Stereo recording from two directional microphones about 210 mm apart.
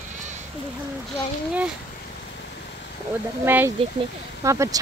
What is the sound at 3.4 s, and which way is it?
Speech, 10° right (ahead or behind).